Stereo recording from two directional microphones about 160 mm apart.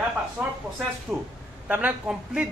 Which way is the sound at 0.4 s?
15° right (ahead or behind).